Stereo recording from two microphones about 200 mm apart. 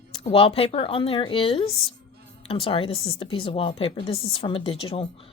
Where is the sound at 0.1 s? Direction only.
30° left (ahead or behind).